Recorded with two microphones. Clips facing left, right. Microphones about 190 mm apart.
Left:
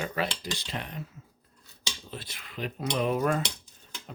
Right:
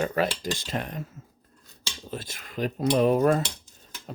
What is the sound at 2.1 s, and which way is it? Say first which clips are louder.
Speech: right 6 dB; 45° right (ahead or behind).